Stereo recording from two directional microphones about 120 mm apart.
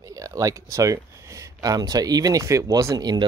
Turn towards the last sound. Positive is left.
turn(degrees=-35)  # may be behind; listen again after turning